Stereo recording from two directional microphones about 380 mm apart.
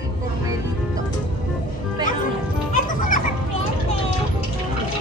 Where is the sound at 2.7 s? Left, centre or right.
Left.